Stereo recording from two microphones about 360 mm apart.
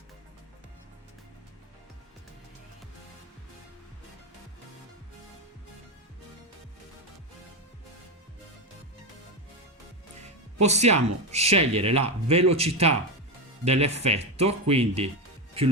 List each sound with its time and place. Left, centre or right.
10.6 s speech: centre